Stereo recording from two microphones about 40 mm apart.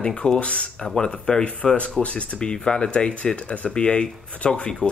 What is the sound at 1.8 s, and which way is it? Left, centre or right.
Speech, left.